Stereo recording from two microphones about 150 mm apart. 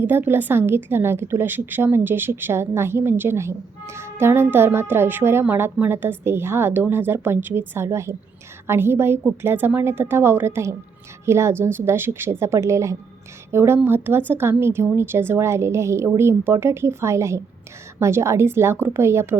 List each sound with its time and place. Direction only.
0.0 s a woman's voice: 15° right (ahead or behind)